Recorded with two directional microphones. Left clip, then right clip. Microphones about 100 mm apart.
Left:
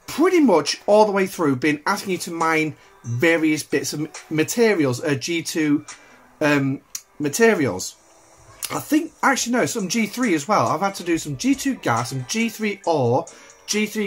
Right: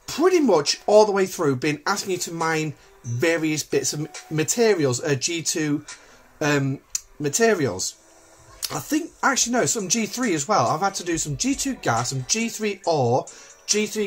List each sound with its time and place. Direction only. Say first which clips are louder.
0.0 s speech: left 2 dB; 5° right (ahead or behind)
6.3 s speech: left 3 dB; 5° right (ahead or behind)